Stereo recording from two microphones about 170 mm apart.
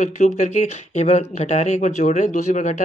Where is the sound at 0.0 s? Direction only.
45° left (ahead or behind).